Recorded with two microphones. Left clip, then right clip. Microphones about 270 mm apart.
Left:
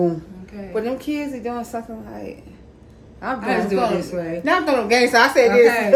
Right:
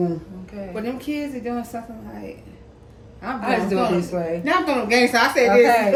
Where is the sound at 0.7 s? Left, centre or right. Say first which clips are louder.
Left 4 dB; centre.